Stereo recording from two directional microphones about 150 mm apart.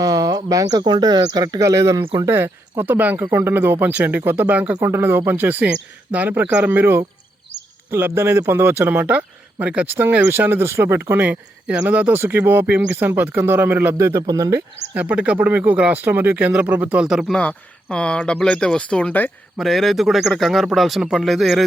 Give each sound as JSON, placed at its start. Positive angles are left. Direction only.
{"t": 0.0, "sound": "speech", "side_deg": -25}
{"t": 14.9, "sound": "speech", "side_deg": -10}
{"t": 17.4, "sound": "speech", "side_deg": 10}